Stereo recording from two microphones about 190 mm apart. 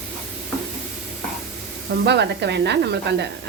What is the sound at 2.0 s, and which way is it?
Speech, 65° right (ahead or behind).